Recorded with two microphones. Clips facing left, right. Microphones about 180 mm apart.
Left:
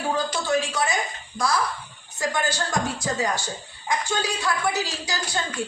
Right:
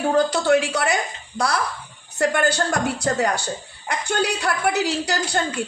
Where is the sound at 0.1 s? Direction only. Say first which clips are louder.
Right 7 dB; 65° right (ahead or behind).